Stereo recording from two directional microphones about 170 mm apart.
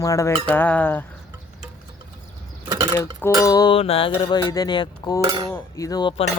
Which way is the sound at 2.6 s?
25° right (ahead or behind).